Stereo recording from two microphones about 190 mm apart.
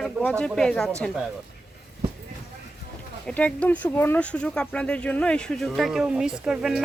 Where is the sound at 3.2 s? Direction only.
5° left (ahead or behind).